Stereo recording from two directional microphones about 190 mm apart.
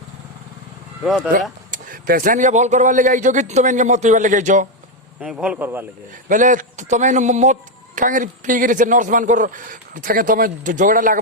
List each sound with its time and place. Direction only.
1.0 s speech: 5° right (ahead or behind)
1.7 s speech: 45° right (ahead or behind)
5.2 s speech: 5° right (ahead or behind)
6.2 s a man's voice: 45° right (ahead or behind)